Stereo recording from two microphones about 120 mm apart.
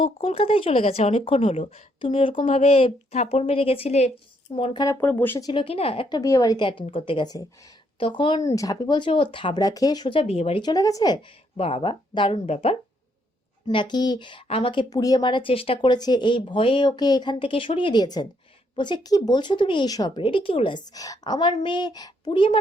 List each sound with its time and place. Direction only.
0.0 s speech: 55° left (ahead or behind)
4.5 s speech: 45° left (ahead or behind)
4.9 s speech: 15° left (ahead or behind)
5.4 s speech: 45° left (ahead or behind)
6.1 s speech: 30° left (ahead or behind)
6.9 s speech: 45° left (ahead or behind)
8.4 s speech: 30° left (ahead or behind)
10.2 s speech: 60° left (ahead or behind)
10.6 s speech: 35° left (ahead or behind)
11.5 s speech: 50° left (ahead or behind)
13.7 s speech: 40° left (ahead or behind)
14.4 s speech: 55° left (ahead or behind)